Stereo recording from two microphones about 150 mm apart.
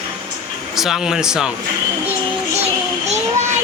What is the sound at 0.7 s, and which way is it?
Speech, centre (ahead or behind).